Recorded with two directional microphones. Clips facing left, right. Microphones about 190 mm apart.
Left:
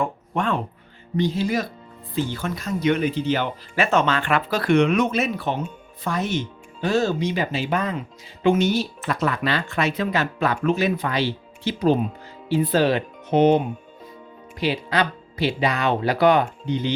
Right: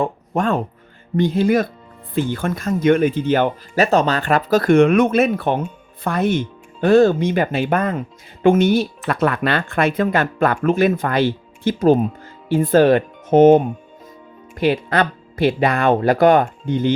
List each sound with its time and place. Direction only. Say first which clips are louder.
0.0 s speech: right 4 dB; 40° right (ahead or behind)
1.1 s speech: right 6 dB; 55° right (ahead or behind)
3.8 s speech: right 3 dB; 35° right (ahead or behind)